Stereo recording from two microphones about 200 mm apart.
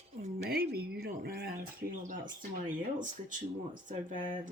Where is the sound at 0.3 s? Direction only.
50° right (ahead or behind).